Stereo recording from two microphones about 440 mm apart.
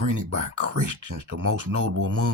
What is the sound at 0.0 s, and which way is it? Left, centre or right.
Speech, right.